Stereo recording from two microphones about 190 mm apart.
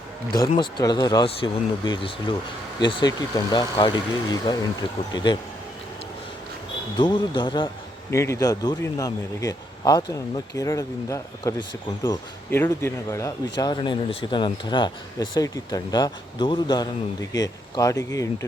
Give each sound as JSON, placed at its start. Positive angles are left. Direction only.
{"t": 0.3, "sound": "speech", "side_deg": 25}
{"t": 6.9, "sound": "speech", "side_deg": 25}